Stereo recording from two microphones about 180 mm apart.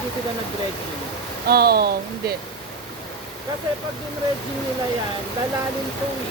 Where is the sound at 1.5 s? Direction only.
60° right (ahead or behind).